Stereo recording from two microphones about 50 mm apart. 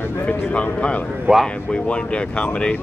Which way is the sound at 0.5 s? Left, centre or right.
Left.